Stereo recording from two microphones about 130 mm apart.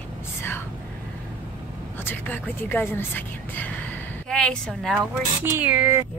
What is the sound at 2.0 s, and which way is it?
Speech, 15° left (ahead or behind).